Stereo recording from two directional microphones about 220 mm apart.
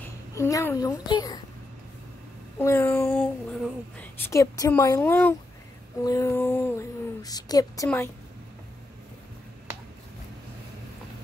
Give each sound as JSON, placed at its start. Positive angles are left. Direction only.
{"t": 0.0, "sound": "a child's voice", "side_deg": 15}
{"t": 2.6, "sound": "speech", "side_deg": 10}